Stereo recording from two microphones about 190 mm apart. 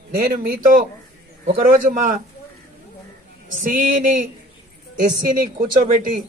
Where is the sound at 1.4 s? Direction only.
45° right (ahead or behind).